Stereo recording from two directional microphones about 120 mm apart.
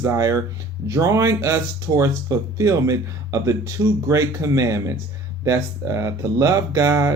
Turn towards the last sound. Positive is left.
turn(degrees=-25)  # may be behind; listen again after turning